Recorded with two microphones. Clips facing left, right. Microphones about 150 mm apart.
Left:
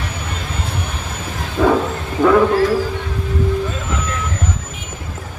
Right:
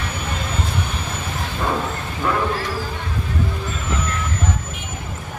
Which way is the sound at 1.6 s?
90° left.